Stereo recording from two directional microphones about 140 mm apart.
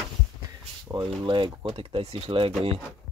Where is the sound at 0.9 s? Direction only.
25° right (ahead or behind).